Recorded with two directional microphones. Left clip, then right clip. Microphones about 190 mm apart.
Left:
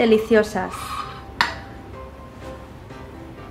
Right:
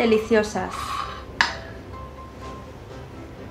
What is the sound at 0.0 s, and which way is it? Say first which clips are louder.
Speech: left 3 dB; 20° left (ahead or behind).